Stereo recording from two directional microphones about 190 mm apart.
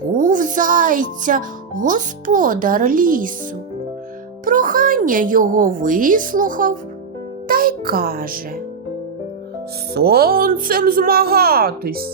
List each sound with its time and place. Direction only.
0.2 s a child's voice: 45° right (ahead or behind)
4.4 s a woman's voice: 45° right (ahead or behind)
7.4 s music: 50° right (ahead or behind)
9.9 s a child's voice: 55° right (ahead or behind)